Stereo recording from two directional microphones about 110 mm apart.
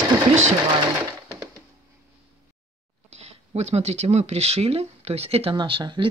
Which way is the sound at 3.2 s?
75° right (ahead or behind).